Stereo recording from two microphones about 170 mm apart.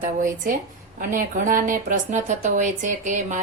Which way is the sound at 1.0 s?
50° right (ahead or behind).